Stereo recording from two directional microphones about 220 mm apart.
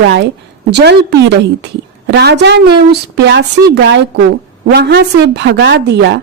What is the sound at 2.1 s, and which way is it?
Speech, 50° right (ahead or behind).